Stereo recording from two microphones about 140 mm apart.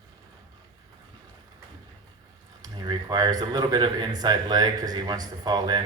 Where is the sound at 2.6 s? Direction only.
30° right (ahead or behind).